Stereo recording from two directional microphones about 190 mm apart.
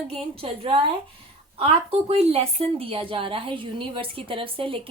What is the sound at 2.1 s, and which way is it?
A woman's voice, 30° right (ahead or behind).